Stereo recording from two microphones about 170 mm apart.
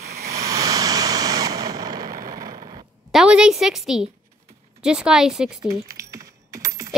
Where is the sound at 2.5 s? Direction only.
35° right (ahead or behind).